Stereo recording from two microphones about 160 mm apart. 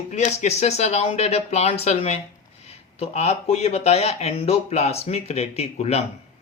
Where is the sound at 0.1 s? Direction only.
45° left (ahead or behind).